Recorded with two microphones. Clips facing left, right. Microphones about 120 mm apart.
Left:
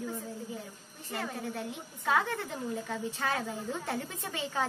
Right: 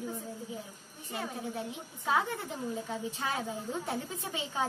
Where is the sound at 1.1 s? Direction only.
15° right (ahead or behind).